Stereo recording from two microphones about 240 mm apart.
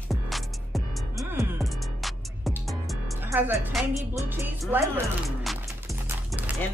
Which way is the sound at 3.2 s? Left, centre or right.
Centre.